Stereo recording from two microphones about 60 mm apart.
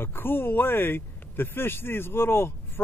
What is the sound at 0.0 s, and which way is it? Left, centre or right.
Speech, left.